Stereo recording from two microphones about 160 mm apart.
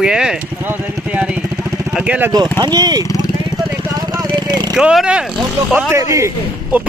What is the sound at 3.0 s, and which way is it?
Vehicle, 20° left (ahead or behind).